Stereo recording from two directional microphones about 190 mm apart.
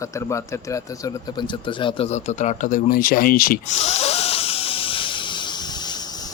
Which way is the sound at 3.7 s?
30° left (ahead or behind).